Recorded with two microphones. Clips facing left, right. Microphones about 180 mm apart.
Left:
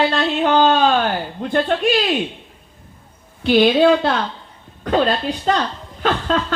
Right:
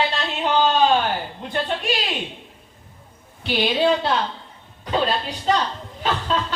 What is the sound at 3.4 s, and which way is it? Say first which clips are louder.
Speech: left 8 dB; 55° left (ahead or behind).